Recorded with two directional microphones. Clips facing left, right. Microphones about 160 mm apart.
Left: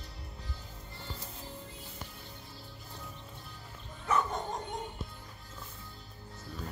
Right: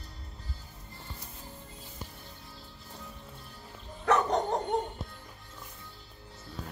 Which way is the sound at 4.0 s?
75° right (ahead or behind).